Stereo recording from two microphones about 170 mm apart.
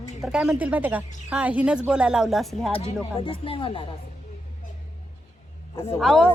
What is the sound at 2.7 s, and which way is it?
Speech, 30° left (ahead or behind).